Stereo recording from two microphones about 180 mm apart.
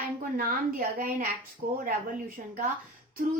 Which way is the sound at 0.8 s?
50° right (ahead or behind).